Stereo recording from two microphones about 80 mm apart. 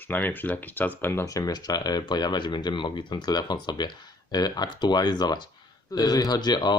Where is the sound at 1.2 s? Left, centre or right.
Left.